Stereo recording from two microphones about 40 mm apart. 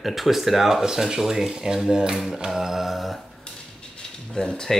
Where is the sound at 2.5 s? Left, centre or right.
Centre.